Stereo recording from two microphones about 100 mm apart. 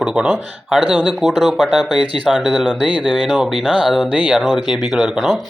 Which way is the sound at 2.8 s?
50° left (ahead or behind).